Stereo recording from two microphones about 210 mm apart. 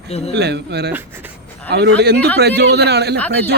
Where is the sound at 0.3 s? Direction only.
50° right (ahead or behind).